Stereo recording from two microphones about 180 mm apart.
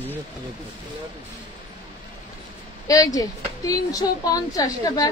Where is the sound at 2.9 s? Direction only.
20° left (ahead or behind).